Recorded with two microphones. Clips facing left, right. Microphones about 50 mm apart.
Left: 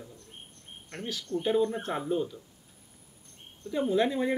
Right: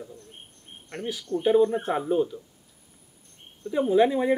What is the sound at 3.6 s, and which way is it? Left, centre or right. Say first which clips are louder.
Speech: right 6 dB; centre.